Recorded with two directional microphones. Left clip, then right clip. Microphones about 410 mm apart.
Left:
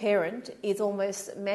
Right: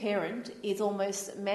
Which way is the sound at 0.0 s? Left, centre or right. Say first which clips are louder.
Left 6 dB; left.